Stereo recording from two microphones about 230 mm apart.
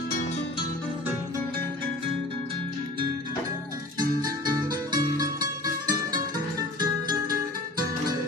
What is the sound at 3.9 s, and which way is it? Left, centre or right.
Music, centre.